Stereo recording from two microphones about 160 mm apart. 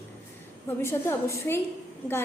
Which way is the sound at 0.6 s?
15° left (ahead or behind).